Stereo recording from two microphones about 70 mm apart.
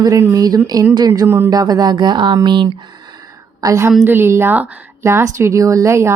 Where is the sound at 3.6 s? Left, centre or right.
Right.